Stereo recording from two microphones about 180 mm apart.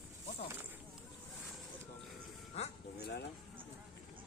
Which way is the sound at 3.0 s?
65° left (ahead or behind).